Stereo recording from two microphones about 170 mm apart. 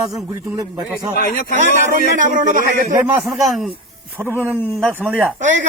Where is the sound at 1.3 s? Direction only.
55° left (ahead or behind).